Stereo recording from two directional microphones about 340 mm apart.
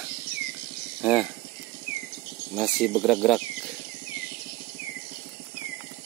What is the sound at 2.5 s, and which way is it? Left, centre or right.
Speech, centre.